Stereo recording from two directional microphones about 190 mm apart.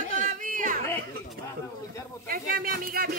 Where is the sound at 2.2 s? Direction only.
50° right (ahead or behind).